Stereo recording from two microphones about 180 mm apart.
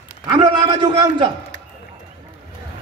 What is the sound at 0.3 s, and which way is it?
A man's voice, 25° right (ahead or behind).